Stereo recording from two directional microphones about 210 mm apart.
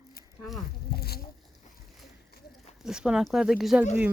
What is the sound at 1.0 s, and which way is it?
Insect, 50° left (ahead or behind).